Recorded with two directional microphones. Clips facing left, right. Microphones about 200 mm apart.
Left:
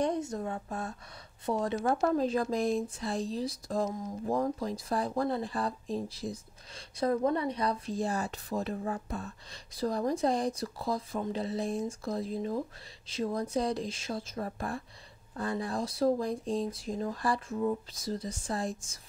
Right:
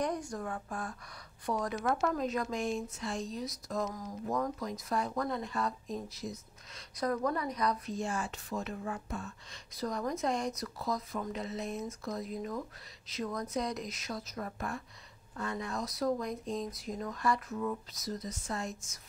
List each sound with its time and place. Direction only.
0.0 s speech: 25° left (ahead or behind)